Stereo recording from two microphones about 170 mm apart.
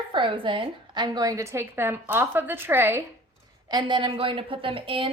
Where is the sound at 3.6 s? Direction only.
25° right (ahead or behind).